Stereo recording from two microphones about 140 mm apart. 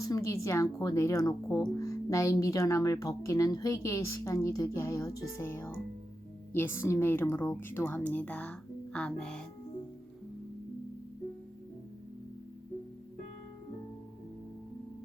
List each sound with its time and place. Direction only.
0.0 s speech: 25° left (ahead or behind); by 9.4 s 5° left (ahead or behind)